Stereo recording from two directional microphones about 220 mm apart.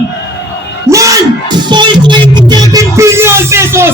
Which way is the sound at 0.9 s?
15° right (ahead or behind).